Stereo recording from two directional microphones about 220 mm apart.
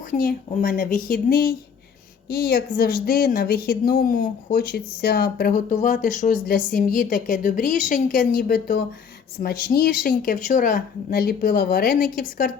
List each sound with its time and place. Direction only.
0.2 s a woman's voice: 40° left (ahead or behind)